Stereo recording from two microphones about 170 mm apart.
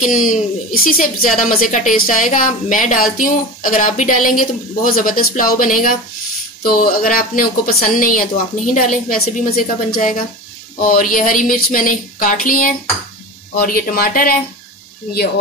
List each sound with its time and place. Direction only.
0.0 s a woman's voice: 50° left (ahead or behind)